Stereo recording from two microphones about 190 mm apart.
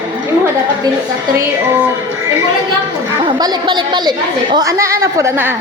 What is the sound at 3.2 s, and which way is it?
A woman's voice, 25° right (ahead or behind).